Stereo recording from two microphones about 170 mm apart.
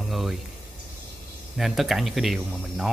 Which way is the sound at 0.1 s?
Centre (ahead or behind).